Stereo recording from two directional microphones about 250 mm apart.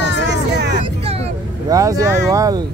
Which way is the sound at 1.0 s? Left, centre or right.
Right.